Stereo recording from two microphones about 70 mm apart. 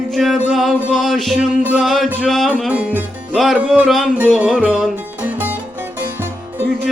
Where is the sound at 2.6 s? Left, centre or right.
Centre.